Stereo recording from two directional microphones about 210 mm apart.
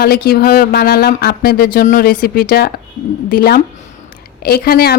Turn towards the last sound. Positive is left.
turn(degrees=45)  # may be behind; listen again after turning